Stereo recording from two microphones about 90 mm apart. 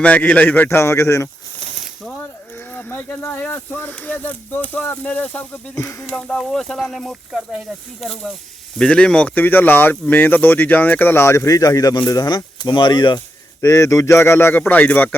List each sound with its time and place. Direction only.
0.0 s speech: 20° left (ahead or behind); by 1.3 s 35° left (ahead or behind)
2.7 s speech: 20° left (ahead or behind)
5.7 s speech: 35° left (ahead or behind)
6.1 s speech: 10° left (ahead or behind); by 12.4 s 40° left (ahead or behind)
12.6 s speech: 55° left (ahead or behind)
13.6 s speech: 35° left (ahead or behind); by 15.1 s 15° left (ahead or behind)